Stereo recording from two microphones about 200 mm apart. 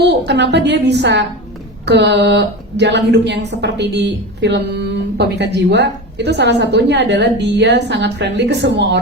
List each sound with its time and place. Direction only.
0.0 s a woman's voice: 60° right (ahead or behind)